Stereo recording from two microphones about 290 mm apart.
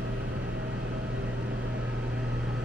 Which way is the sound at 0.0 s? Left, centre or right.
Right.